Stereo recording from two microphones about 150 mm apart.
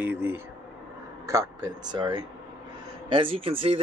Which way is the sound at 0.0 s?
15° right (ahead or behind).